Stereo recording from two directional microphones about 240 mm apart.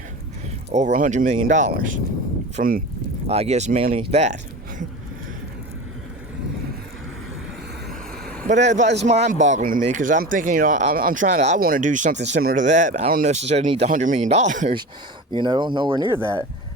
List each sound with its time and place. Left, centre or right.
0.7 s speech: right
3.2 s speech: right
8.4 s speech: right
15.3 s speech: centre